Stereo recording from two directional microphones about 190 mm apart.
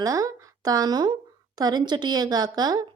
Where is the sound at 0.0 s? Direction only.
20° right (ahead or behind).